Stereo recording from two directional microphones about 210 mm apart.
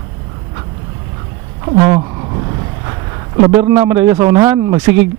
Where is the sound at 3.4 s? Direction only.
15° right (ahead or behind).